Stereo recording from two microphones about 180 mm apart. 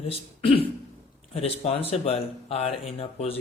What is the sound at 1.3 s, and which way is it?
Speech, 35° left (ahead or behind).